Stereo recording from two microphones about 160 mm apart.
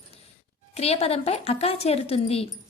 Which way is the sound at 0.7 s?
40° left (ahead or behind).